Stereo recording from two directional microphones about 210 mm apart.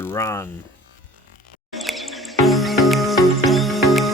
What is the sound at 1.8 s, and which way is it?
Music, centre (ahead or behind).